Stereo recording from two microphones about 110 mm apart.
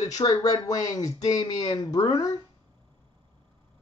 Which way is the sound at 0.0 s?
35° left (ahead or behind).